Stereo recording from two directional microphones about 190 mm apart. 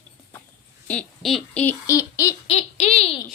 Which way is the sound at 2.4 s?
35° left (ahead or behind).